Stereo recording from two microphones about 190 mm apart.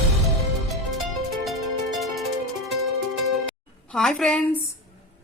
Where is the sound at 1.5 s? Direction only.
Centre (ahead or behind).